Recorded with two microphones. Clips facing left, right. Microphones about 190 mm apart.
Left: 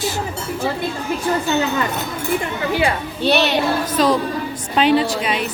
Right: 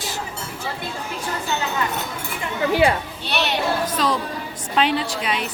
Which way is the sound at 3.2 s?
90° left.